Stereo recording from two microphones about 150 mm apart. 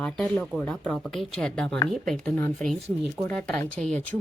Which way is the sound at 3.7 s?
5° left (ahead or behind).